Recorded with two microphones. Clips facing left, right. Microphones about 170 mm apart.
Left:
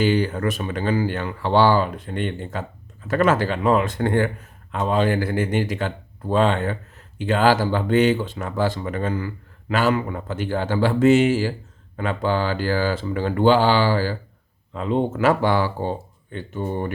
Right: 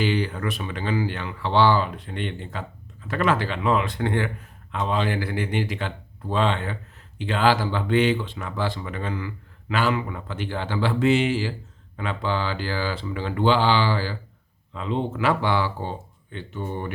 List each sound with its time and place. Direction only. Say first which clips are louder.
0.0 s speech: left 4 dB; 45° left (ahead or behind)